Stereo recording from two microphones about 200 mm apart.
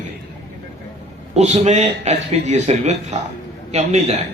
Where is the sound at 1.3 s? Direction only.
35° right (ahead or behind).